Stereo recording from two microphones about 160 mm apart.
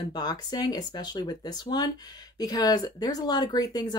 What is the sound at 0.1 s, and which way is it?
Speech, 25° left (ahead or behind).